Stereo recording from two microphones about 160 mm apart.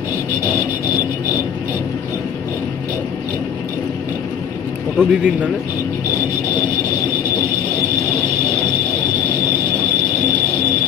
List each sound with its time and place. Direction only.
4.9 s speech: 10° right (ahead or behind)